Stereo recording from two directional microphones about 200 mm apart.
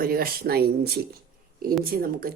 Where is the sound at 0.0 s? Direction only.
50° right (ahead or behind).